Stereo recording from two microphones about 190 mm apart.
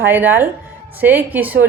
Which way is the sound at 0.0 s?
10° right (ahead or behind).